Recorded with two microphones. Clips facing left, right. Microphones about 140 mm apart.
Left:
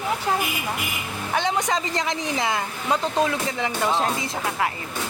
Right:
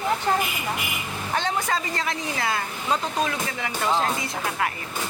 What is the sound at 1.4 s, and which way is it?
Speech, 15° left (ahead or behind).